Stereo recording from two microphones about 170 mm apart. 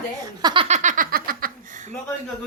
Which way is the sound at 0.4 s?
30° right (ahead or behind).